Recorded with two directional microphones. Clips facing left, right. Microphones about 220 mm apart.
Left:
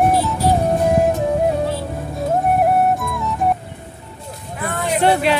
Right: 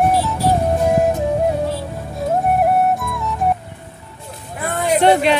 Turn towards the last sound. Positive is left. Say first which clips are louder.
# right 2 dB
turn(degrees=5)  # may be behind; listen again after turning